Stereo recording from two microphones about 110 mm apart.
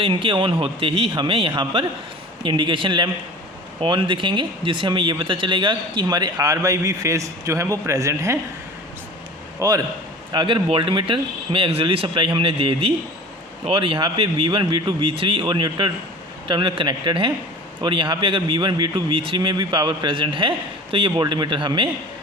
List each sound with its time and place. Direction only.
0.0 s speech: 50° right (ahead or behind); by 8.4 s 25° right (ahead or behind)
9.6 s a man's voice: 30° right (ahead or behind)
10.3 s speech: 50° right (ahead or behind)